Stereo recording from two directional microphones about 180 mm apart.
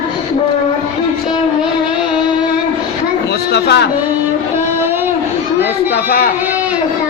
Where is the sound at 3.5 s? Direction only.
70° left (ahead or behind).